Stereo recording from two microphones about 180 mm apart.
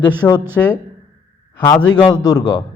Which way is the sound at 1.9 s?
25° left (ahead or behind).